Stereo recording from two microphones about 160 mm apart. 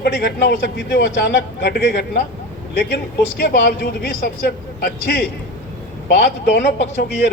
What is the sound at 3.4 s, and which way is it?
A man's voice, 75° left (ahead or behind).